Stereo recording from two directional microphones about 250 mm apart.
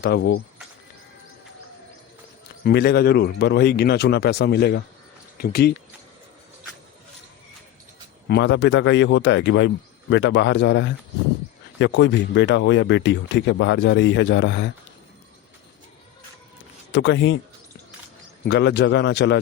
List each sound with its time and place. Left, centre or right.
0.0 s speech: left
2.6 s speech: left
8.3 s speech: left
16.9 s speech: left
18.4 s speech: left